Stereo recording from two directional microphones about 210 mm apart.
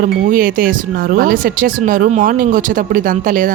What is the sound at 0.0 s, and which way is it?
Speech, 40° right (ahead or behind).